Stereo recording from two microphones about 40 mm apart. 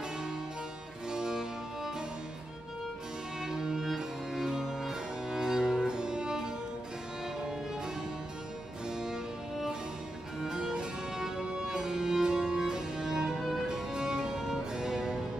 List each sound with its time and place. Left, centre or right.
1.1 s music: centre
3.3 s music: centre